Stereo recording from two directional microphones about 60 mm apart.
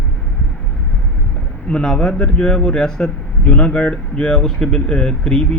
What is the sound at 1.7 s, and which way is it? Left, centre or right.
Speech, centre.